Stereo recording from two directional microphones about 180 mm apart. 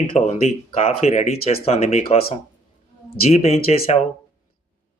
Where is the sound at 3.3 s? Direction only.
35° left (ahead or behind).